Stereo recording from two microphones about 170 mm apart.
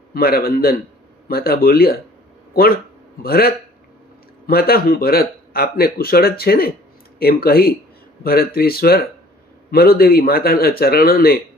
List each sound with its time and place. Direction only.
0.1 s speech: 60° left (ahead or behind)